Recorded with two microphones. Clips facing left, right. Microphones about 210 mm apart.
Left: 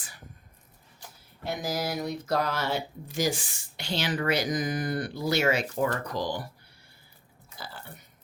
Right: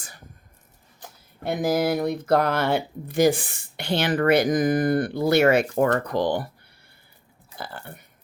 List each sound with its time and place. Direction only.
1.5 s speech: 55° right (ahead or behind)
7.5 s speech: 55° right (ahead or behind)